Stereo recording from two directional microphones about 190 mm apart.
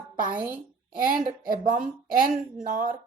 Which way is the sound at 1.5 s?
45° right (ahead or behind).